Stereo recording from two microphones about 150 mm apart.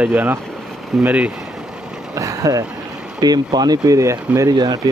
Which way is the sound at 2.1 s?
20° right (ahead or behind).